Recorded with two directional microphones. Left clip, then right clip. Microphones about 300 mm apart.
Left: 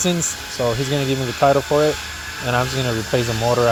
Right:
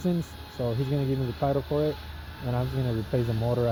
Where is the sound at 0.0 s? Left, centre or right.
Left.